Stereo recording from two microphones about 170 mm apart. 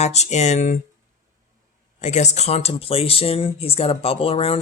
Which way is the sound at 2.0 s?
45° left (ahead or behind).